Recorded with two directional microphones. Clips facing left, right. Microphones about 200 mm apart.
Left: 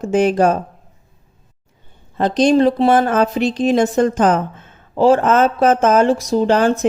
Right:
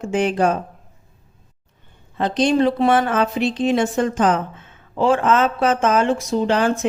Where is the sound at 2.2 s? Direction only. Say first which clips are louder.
Left 4 dB; 40° left (ahead or behind).